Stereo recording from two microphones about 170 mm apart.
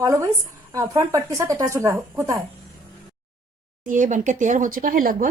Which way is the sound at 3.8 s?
50° right (ahead or behind).